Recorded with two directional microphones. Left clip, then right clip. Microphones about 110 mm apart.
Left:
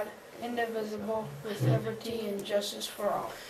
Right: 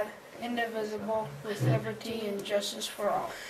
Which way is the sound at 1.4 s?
Centre (ahead or behind).